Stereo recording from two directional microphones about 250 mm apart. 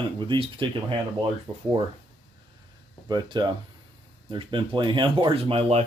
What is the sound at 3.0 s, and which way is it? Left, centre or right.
Speech, centre.